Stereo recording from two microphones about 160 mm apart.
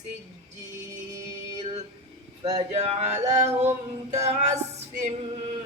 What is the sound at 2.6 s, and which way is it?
Music, 40° right (ahead or behind).